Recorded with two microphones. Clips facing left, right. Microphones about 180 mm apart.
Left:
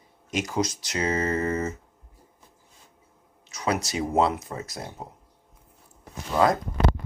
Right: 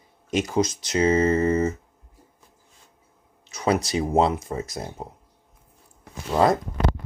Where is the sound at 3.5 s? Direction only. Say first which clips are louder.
Right 4 dB; 30° right (ahead or behind).